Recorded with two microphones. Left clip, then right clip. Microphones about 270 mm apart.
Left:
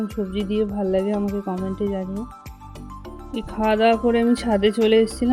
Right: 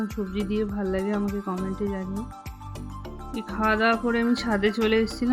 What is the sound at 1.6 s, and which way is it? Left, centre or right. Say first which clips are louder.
Speech: left 5 dB; centre.